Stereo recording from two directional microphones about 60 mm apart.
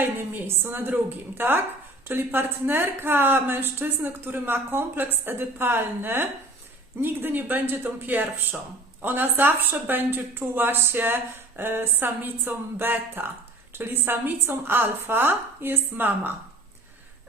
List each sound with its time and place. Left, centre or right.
0.0 s a woman's voice: right